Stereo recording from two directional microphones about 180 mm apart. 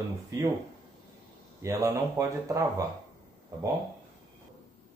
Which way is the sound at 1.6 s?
15° right (ahead or behind).